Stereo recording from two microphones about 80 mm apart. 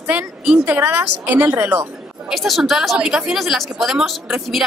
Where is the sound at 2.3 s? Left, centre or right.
Centre.